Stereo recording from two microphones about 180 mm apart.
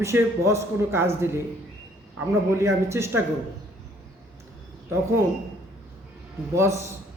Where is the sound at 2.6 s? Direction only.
15° right (ahead or behind).